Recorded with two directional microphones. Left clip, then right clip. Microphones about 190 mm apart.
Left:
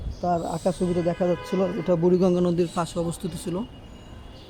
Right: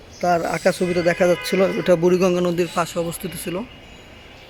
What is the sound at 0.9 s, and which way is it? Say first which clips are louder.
A man's voice: right 7 dB; 10° right (ahead or behind).